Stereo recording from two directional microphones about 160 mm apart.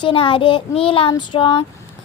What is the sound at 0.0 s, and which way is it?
A woman's voice, 35° left (ahead or behind).